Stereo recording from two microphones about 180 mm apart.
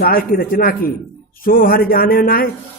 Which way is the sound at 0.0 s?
55° left (ahead or behind).